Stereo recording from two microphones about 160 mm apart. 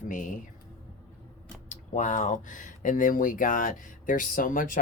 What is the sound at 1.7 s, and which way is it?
Speech, 50° left (ahead or behind).